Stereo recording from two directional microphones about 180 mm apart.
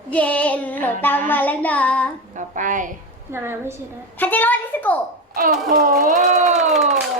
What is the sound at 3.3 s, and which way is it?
Speech, 15° right (ahead or behind).